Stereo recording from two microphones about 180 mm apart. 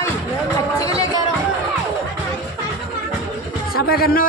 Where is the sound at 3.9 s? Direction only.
60° left (ahead or behind).